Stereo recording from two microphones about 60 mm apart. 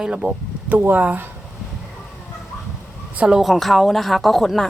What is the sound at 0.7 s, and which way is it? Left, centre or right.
Speech, right.